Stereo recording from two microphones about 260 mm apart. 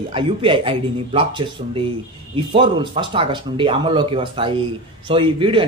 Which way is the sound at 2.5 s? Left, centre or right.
Centre.